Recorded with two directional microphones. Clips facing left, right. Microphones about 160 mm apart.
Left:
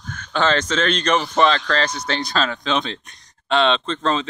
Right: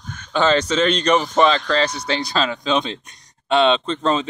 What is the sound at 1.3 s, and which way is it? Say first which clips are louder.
Speech: right 1 dB; 5° right (ahead or behind).